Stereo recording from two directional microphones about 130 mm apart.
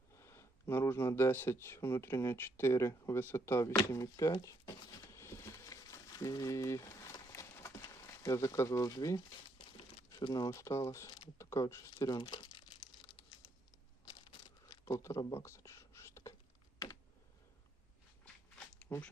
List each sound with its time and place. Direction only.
0.2 s speech: 20° left (ahead or behind)
4.4 s a sound: 25° left (ahead or behind)
10.2 s speech: 35° left (ahead or behind)
14.0 s a sound: 30° left (ahead or behind)
15.4 s whispering: 20° left (ahead or behind)
18.9 s speech: 10° left (ahead or behind)